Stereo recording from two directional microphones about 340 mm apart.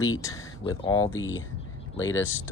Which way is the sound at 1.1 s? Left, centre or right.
Left.